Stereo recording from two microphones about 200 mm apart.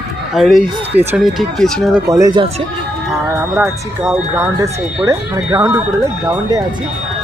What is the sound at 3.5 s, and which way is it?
Speech, 10° right (ahead or behind).